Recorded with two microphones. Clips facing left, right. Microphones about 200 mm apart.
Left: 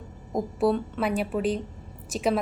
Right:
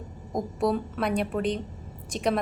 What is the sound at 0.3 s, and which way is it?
A woman's voice, centre (ahead or behind).